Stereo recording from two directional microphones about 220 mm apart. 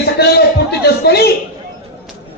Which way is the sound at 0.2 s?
45° left (ahead or behind).